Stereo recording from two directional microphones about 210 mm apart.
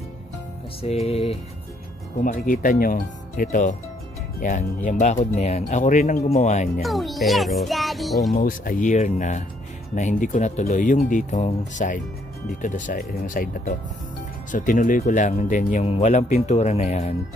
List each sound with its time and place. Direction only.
0.8 s music: 30° left (ahead or behind)
2.2 s speech: 40° left (ahead or behind)
6.8 s a child's voice: centre (ahead or behind)
8.3 s speech: 40° left (ahead or behind)